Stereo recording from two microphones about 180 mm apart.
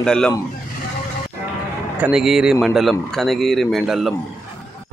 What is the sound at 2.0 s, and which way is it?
Speech, 5° right (ahead or behind).